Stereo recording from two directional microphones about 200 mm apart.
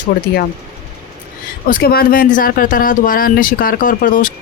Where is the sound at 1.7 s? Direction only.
50° left (ahead or behind).